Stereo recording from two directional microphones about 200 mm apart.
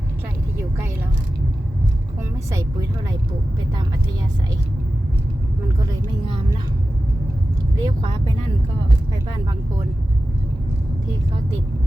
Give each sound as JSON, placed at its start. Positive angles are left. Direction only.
{"t": 2.5, "sound": "speech", "side_deg": -15}
{"t": 5.8, "sound": "speech", "side_deg": -20}
{"t": 7.8, "sound": "speech", "side_deg": -20}